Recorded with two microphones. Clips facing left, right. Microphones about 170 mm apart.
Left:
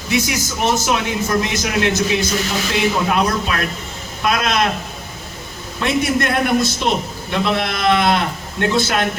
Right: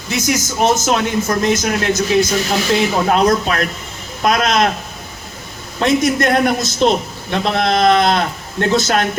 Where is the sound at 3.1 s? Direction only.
45° right (ahead or behind).